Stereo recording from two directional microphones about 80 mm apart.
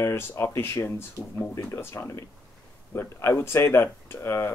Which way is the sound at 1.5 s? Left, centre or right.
Left.